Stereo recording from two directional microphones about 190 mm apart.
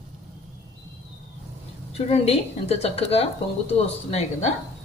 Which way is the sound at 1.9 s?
30° left (ahead or behind).